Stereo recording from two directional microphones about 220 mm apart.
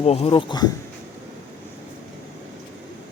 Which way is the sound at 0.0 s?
25° left (ahead or behind).